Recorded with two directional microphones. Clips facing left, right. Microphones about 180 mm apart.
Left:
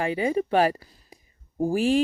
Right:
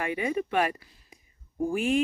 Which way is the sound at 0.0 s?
30° left (ahead or behind).